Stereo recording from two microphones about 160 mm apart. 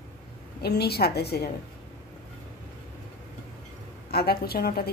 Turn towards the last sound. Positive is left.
turn(degrees=70)  # may be behind; listen again after turning